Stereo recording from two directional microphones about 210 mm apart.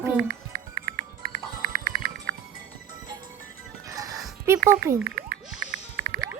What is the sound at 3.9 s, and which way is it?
Music, 15° right (ahead or behind).